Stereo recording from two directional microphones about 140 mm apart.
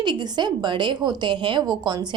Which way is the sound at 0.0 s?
30° right (ahead or behind).